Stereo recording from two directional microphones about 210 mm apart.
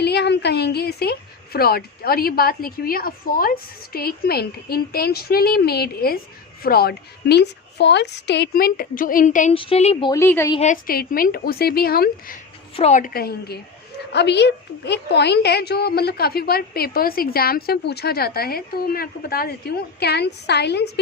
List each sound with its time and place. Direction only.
0.0 s a woman's voice: 50° left (ahead or behind); by 10.5 s 10° left (ahead or behind)
10.5 s a woman's voice: 35° left (ahead or behind)
12.7 s a woman's voice: 35° left (ahead or behind); by 21.0 s 55° left (ahead or behind)